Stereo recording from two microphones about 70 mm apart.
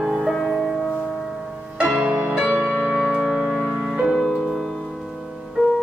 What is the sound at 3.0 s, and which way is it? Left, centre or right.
Music, centre.